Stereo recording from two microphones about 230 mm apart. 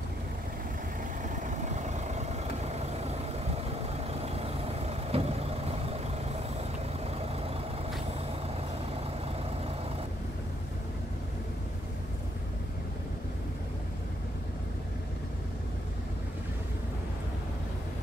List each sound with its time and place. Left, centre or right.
1.3 s vehicle: right
4.1 s vehicle: right
7.2 s vehicle: right